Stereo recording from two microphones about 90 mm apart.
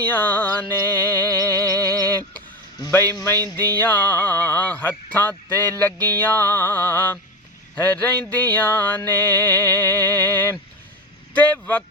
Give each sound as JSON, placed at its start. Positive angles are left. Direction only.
{"t": 0.0, "sound": "music", "side_deg": 20}
{"t": 1.6, "sound": "music", "side_deg": -40}
{"t": 2.0, "sound": "a sound", "side_deg": 20}
{"t": 3.3, "sound": "a sound", "side_deg": -45}
{"t": 3.8, "sound": "music", "side_deg": 20}
{"t": 11.3, "sound": "speech", "side_deg": 20}